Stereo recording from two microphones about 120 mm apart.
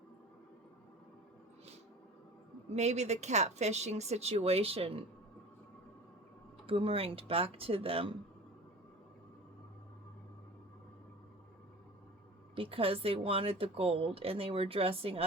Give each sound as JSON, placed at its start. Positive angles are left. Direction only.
{"t": 2.7, "sound": "speech", "side_deg": -70}
{"t": 6.7, "sound": "speech", "side_deg": -50}
{"t": 12.5, "sound": "speech", "side_deg": -50}